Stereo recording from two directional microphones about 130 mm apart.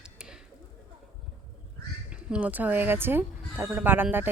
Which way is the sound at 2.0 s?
10° right (ahead or behind).